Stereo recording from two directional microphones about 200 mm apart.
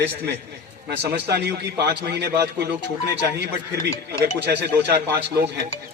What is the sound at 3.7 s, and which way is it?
Speech, 15° left (ahead or behind).